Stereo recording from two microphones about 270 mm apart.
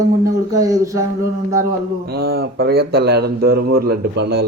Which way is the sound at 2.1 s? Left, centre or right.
Right.